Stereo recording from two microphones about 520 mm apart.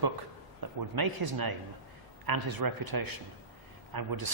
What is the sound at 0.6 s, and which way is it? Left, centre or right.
A man's voice, right.